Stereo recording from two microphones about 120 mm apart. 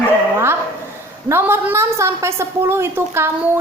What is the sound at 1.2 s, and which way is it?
A woman's voice, 20° right (ahead or behind).